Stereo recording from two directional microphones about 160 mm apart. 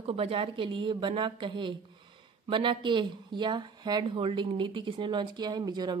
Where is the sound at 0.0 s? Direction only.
35° right (ahead or behind).